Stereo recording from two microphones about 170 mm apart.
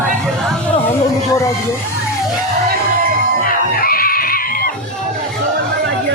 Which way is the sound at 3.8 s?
60° left (ahead or behind).